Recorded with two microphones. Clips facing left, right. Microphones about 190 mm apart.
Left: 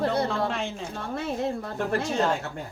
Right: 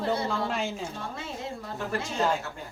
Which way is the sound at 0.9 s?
55° left (ahead or behind).